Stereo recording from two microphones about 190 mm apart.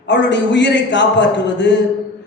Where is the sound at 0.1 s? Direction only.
65° left (ahead or behind).